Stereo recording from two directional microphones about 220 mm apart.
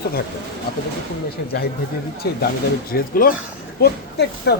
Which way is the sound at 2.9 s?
40° left (ahead or behind).